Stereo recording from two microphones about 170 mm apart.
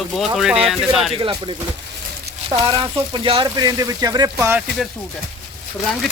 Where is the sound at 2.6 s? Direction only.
30° right (ahead or behind).